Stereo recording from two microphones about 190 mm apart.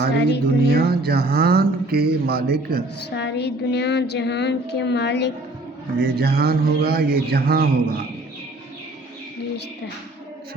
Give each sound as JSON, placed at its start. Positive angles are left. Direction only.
{"t": 0.2, "sound": "child singing", "side_deg": 60}
{"t": 0.7, "sound": "speech", "side_deg": -55}
{"t": 3.2, "sound": "child singing", "side_deg": 65}
{"t": 6.0, "sound": "speech", "side_deg": -55}